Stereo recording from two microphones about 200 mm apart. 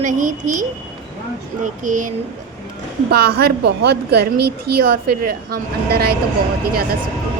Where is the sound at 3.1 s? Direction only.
50° right (ahead or behind).